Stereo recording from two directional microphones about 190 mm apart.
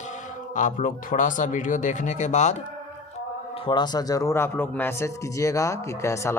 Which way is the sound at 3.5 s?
25° left (ahead or behind).